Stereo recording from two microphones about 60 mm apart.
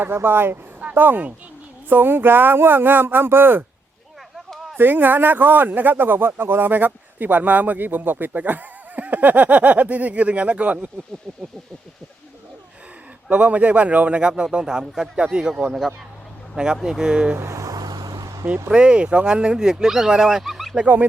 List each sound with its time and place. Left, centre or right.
0.0 s speech: right
4.8 s speech: right
13.3 s speech: right
16.8 s speech: centre
17.3 s vehicle: right
18.7 s speech: centre
20.8 s speech: right